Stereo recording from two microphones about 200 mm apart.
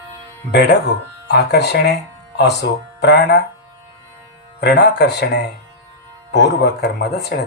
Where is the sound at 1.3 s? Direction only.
55° left (ahead or behind).